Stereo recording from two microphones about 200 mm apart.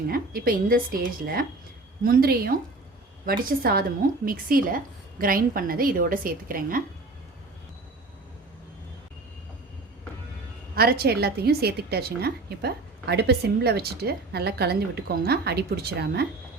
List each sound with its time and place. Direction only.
0.1 s a woman's voice: 45° right (ahead or behind)
10.8 s a woman's voice: 50° right (ahead or behind)